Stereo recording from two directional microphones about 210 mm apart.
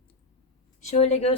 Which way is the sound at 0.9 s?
30° left (ahead or behind).